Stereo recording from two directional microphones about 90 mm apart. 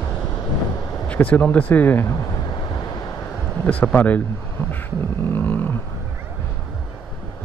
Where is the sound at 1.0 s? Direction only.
15° left (ahead or behind).